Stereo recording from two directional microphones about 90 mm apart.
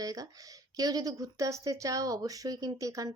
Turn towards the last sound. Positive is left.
turn(degrees=-40)  # may be behind; listen again after turning